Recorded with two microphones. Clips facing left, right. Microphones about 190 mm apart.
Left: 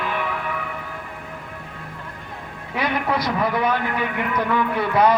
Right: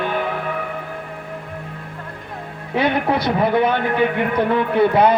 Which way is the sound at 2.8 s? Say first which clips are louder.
Right 5 dB; 30° right (ahead or behind).